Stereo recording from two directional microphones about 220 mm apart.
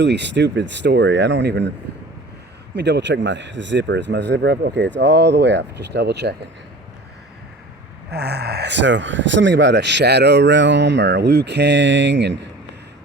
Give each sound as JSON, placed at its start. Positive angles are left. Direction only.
{"t": 0.0, "sound": "speech", "side_deg": -50}
{"t": 2.7, "sound": "speech", "side_deg": -50}
{"t": 8.1, "sound": "speech", "side_deg": -45}